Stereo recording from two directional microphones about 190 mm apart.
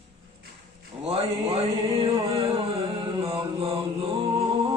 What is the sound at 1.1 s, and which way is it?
Music, 30° right (ahead or behind).